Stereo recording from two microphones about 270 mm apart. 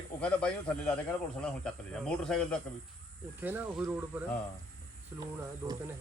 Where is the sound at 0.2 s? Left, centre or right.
Centre.